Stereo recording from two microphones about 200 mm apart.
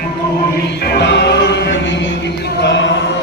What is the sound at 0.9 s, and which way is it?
Music, 55° left (ahead or behind).